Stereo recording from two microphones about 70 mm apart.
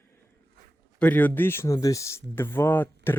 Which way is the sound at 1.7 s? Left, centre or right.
Left.